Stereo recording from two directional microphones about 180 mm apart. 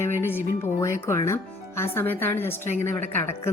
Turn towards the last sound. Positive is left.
turn(degrees=10)  # may be behind; listen again after turning